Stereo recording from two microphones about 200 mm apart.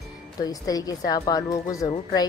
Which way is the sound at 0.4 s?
20° left (ahead or behind).